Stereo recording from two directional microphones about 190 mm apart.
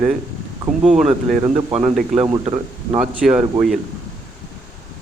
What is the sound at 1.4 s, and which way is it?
Speech, 20° right (ahead or behind).